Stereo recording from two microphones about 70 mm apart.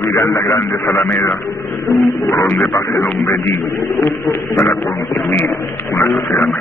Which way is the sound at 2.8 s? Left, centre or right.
Left.